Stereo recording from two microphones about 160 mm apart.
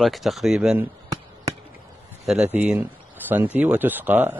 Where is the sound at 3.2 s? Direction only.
10° right (ahead or behind).